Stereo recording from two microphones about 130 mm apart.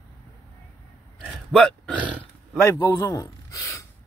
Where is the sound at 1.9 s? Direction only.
10° right (ahead or behind).